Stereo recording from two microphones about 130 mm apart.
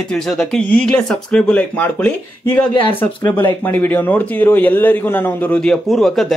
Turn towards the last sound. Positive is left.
turn(degrees=0)  # may be behind; listen again after turning